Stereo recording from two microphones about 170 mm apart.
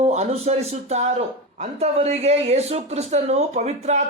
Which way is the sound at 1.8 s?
40° right (ahead or behind).